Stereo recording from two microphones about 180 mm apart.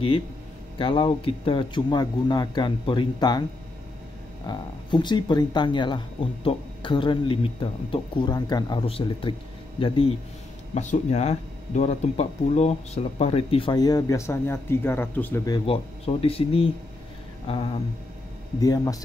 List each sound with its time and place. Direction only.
0.7 s speech: 30° left (ahead or behind)
4.5 s speech: 25° left (ahead or behind)
10.7 s speech: 40° left (ahead or behind); by 15.6 s 15° left (ahead or behind)
15.6 s speech: 30° left (ahead or behind)
18.6 s speech: 20° left (ahead or behind)